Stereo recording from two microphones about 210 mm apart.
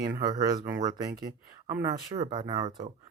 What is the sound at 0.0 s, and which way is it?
Speech, 20° right (ahead or behind).